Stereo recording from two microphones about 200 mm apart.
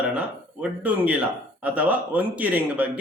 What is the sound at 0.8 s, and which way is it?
A man's voice, 10° right (ahead or behind).